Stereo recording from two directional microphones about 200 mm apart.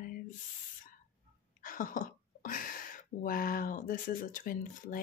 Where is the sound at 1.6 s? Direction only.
45° left (ahead or behind).